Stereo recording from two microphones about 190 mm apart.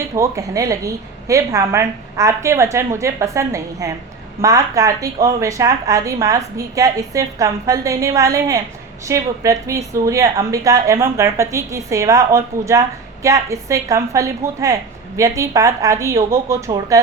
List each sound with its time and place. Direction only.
0.2 s a woman's voice: 15° right (ahead or behind)